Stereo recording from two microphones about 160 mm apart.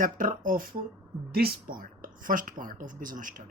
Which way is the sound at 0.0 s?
60° right (ahead or behind).